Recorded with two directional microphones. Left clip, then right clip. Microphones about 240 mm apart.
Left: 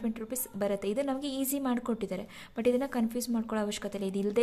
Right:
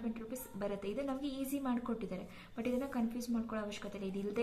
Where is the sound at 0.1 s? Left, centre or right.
Left.